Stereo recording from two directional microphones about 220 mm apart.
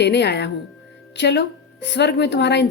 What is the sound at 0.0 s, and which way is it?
Speech, 50° left (ahead or behind).